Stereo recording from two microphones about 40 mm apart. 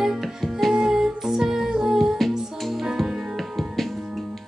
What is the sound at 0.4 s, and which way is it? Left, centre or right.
Music, centre.